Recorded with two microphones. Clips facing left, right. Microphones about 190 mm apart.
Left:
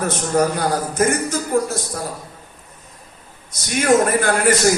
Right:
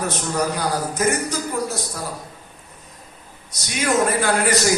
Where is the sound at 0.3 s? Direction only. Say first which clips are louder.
Left 5 dB; 50° left (ahead or behind).